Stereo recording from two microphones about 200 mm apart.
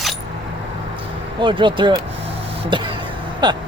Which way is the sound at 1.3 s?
25° right (ahead or behind).